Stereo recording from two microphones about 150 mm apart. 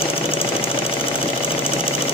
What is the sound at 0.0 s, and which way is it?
Engine knocking, 40° left (ahead or behind).